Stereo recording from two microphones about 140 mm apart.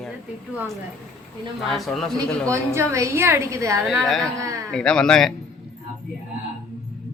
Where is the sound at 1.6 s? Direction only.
Centre (ahead or behind).